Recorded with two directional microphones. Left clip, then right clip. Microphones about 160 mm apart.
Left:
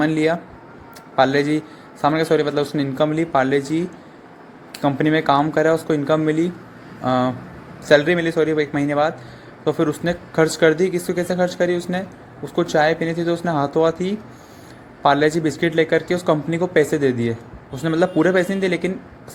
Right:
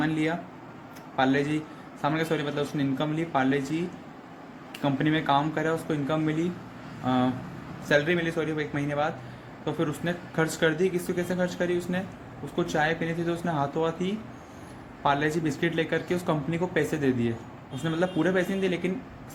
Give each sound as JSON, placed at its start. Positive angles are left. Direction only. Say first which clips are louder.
{"t": 0.0, "sound": "a man's voice", "louder": "left 9 dB", "side_deg": 55}